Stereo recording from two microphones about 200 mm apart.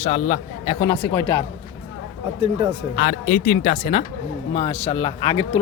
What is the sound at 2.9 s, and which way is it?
A man's voice, 45° left (ahead or behind).